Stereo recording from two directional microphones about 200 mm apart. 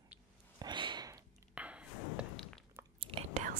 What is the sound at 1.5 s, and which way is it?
Ping, 5° right (ahead or behind).